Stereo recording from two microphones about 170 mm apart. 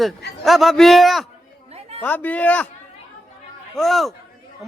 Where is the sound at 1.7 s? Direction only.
35° right (ahead or behind).